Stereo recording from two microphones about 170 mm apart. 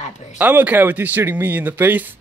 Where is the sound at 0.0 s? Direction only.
45° left (ahead or behind).